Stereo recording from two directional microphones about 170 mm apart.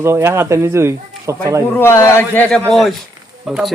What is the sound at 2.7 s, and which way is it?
Speech, centre (ahead or behind).